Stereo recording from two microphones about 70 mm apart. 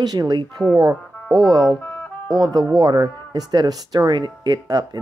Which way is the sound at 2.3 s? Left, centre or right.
Right.